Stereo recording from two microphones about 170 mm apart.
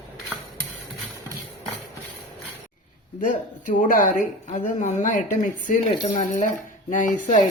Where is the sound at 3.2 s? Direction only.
50° left (ahead or behind).